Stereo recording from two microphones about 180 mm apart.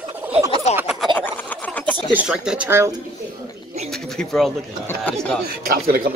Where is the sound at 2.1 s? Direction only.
5° right (ahead or behind).